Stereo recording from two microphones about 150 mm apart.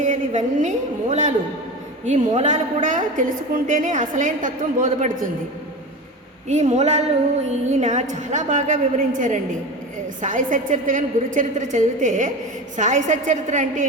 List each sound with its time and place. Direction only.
0.0 s a woman's voice: 55° right (ahead or behind)
6.5 s a woman's voice: 50° right (ahead or behind)